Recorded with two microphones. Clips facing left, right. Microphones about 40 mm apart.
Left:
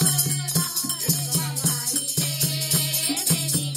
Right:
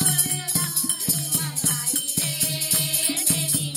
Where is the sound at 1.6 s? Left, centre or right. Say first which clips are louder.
Left 1 dB; right.